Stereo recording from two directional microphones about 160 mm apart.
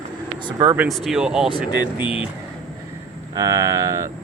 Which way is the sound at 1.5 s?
30° left (ahead or behind).